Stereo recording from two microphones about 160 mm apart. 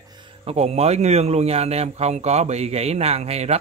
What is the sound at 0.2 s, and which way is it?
A man's voice, 40° right (ahead or behind).